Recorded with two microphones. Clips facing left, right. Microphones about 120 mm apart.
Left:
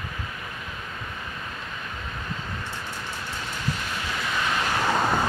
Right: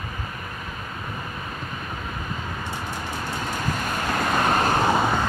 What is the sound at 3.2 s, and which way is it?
Vehicle, 45° right (ahead or behind).